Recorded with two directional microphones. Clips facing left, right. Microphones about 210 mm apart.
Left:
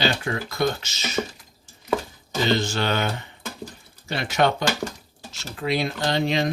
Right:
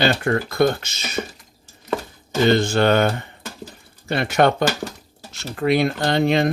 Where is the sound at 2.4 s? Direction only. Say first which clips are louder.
Right 6 dB; 55° right (ahead or behind).